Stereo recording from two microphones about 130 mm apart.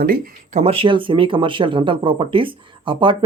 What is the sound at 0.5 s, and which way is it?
Speech, 50° right (ahead or behind).